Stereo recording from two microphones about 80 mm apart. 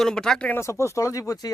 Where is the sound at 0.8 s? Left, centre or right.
Left.